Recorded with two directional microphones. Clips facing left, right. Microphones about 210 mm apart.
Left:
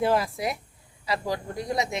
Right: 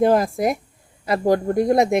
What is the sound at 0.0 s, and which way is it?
Speech, 45° right (ahead or behind).